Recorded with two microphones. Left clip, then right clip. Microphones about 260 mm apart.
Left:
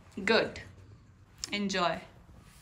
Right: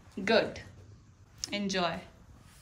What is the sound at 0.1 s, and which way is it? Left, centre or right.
Speech, centre.